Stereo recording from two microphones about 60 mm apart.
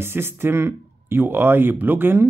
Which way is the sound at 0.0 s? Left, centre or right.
Right.